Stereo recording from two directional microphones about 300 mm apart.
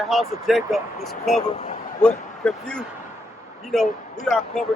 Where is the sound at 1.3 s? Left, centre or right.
Left.